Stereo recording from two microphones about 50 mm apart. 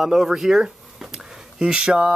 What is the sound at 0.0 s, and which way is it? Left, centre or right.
Speech, centre.